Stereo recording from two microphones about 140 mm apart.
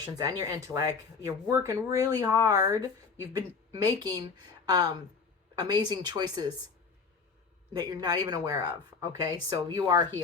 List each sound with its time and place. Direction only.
0.2 s speech: 25° right (ahead or behind)
7.8 s speech: 25° right (ahead or behind)